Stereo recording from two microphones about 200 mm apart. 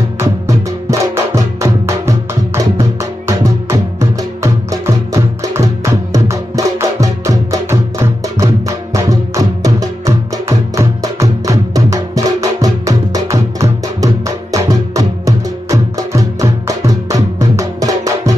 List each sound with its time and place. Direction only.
0.2 s music: 15° right (ahead or behind)